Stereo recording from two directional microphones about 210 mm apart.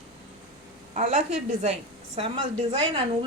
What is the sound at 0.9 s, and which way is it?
A woman's voice, 35° right (ahead or behind).